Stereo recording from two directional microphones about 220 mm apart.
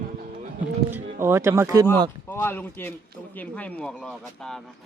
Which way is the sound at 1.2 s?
10° right (ahead or behind).